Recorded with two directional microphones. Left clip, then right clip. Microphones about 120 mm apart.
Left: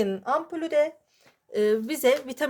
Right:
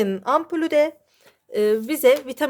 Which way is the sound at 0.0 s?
60° right (ahead or behind).